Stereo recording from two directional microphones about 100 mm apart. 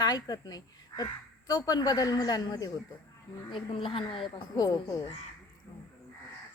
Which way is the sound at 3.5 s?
60° left (ahead or behind).